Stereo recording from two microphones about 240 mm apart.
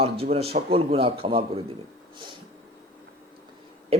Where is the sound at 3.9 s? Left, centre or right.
Right.